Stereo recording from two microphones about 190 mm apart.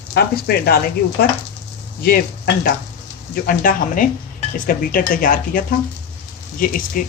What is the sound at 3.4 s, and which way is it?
Speech, 45° left (ahead or behind).